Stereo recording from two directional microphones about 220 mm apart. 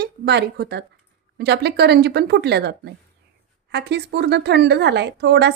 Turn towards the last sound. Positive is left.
turn(degrees=-50)  # may be behind; listen again after turning